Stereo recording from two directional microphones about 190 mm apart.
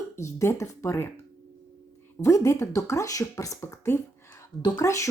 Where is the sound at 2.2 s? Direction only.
15° left (ahead or behind).